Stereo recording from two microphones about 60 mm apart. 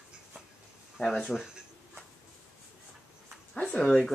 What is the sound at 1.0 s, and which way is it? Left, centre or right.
Speech, centre.